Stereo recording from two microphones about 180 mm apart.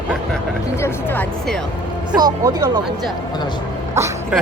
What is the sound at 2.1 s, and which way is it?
Speech, 20° right (ahead or behind).